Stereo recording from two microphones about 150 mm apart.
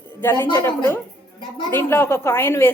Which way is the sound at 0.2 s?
15° left (ahead or behind).